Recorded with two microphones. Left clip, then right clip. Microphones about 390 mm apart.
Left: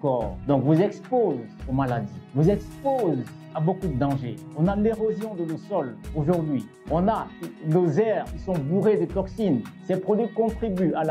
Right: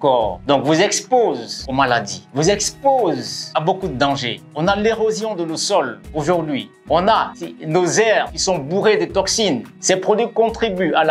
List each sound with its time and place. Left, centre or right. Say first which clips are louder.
0.0 s speech: right 10 dB; centre
0.5 s speech: right 6 dB; centre
1.1 s speech: right 6 dB; centre
1.8 s speech: right 11 dB; centre
8.5 s speech: right 8 dB; right
8.8 s speech: right 8 dB; centre